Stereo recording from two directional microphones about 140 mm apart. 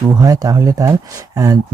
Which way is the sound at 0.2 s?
25° right (ahead or behind).